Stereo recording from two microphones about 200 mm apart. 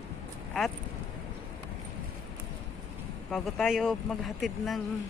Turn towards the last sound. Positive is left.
turn(degrees=0)  # may be behind; listen again after turning